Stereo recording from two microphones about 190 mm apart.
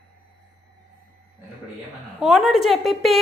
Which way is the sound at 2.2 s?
Centre (ahead or behind).